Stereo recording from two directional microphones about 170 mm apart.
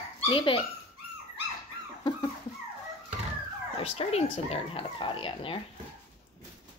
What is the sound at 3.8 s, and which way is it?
Speech, 35° left (ahead or behind).